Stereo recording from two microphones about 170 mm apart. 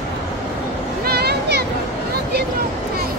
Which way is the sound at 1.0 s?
70° right (ahead or behind).